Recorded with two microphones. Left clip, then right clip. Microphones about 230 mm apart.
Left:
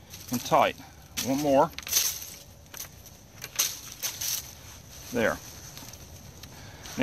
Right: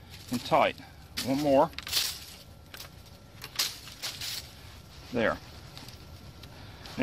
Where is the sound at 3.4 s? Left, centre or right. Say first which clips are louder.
Left 2 dB; centre.